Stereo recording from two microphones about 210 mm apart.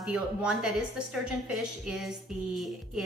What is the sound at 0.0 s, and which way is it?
A woman's voice, 5° right (ahead or behind).